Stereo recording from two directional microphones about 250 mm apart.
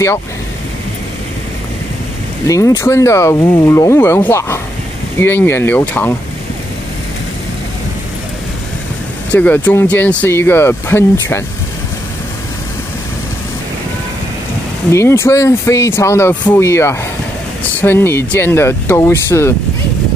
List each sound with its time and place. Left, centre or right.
2.4 s speech: centre
9.3 s speech: centre
14.9 s speech: centre